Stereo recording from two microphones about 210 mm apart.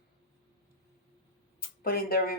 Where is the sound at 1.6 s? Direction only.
45° left (ahead or behind).